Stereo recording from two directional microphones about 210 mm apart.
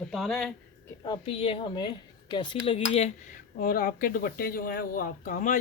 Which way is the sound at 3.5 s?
45° left (ahead or behind).